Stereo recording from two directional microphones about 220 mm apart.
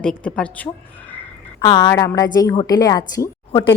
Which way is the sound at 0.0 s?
5° left (ahead or behind).